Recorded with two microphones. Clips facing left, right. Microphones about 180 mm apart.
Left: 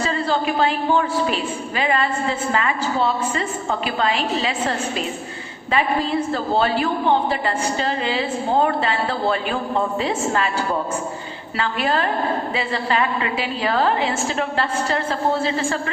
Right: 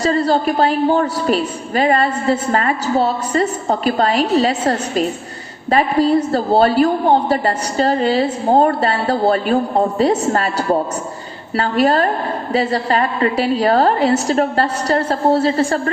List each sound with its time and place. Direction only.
0.0 s a woman's voice: 40° right (ahead or behind)